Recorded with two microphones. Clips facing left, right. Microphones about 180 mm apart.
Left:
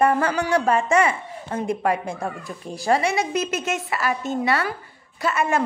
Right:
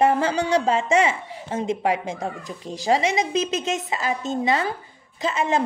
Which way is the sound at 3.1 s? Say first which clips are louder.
Right 1 dB; 20° right (ahead or behind).